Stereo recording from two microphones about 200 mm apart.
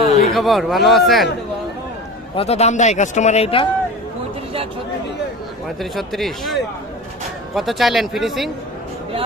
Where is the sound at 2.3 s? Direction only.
30° left (ahead or behind).